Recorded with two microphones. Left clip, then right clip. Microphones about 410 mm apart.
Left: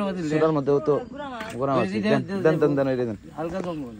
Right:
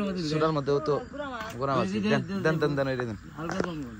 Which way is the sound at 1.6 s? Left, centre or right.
Left.